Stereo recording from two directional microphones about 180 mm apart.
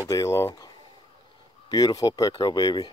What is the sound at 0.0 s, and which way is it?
Speech, 15° left (ahead or behind).